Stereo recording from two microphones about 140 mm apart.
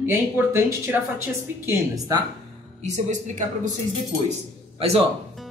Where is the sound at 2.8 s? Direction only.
60° right (ahead or behind).